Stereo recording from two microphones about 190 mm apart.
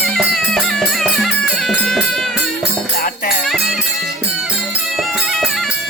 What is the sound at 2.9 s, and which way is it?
Music, 50° left (ahead or behind).